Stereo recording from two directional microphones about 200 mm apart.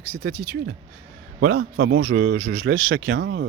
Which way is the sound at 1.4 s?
50° right (ahead or behind).